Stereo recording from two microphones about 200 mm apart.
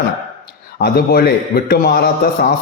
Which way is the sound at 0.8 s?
50° left (ahead or behind).